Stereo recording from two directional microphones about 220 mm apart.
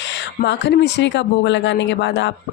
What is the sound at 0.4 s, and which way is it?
Speech, 50° left (ahead or behind).